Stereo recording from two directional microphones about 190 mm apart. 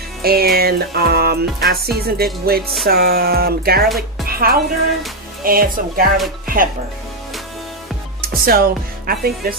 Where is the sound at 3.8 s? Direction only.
Centre (ahead or behind).